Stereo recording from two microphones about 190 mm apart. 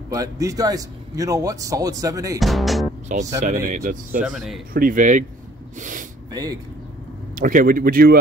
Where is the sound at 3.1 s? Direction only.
40° right (ahead or behind).